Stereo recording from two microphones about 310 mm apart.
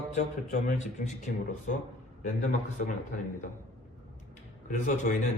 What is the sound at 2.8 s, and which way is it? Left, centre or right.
Speech, left.